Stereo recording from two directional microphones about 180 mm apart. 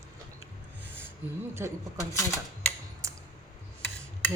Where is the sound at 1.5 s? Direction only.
15° right (ahead or behind).